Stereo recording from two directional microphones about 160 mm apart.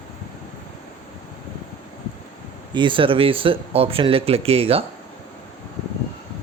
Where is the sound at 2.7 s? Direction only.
30° right (ahead or behind).